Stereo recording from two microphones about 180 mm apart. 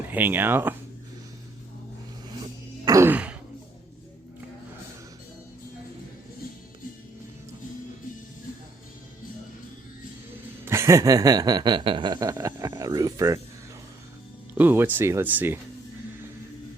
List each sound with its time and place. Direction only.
0.0 s speech: 10° right (ahead or behind)
2.4 s throat clearing: 20° right (ahead or behind)
10.7 s a sound: 15° right (ahead or behind)
14.5 s speech: 10° right (ahead or behind)